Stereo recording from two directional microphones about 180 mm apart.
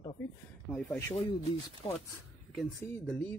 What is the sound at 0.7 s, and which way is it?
Speech, 5° left (ahead or behind).